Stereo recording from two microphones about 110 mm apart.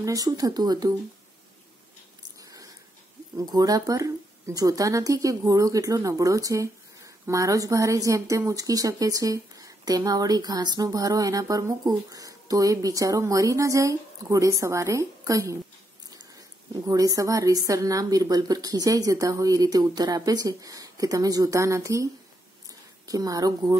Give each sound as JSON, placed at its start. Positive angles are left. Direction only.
{"t": 0.0, "sound": "speech", "side_deg": -30}
{"t": 2.4, "sound": "a sound", "side_deg": -30}
{"t": 3.3, "sound": "speech", "side_deg": -35}
{"t": 16.8, "sound": "speech", "side_deg": -35}